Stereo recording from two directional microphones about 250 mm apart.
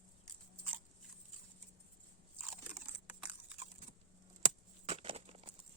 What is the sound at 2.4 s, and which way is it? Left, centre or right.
Crunch, centre.